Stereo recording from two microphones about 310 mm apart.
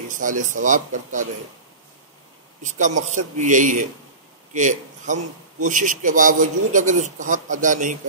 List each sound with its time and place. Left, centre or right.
0.1 s a man's voice: right
2.6 s a man's voice: right